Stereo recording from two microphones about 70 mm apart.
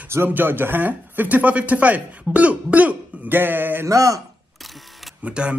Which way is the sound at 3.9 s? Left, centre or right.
Right.